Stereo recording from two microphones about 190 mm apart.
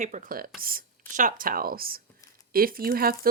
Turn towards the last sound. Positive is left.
turn(degrees=-50)  # may be behind; listen again after turning